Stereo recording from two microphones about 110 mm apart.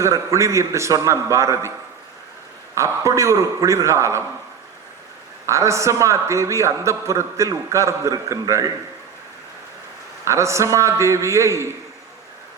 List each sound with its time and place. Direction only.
0.0 s a man's voice: 30° right (ahead or behind)
2.7 s a man's voice: 30° right (ahead or behind)
5.5 s a man's voice: 25° right (ahead or behind)
10.2 s a man's voice: 25° right (ahead or behind)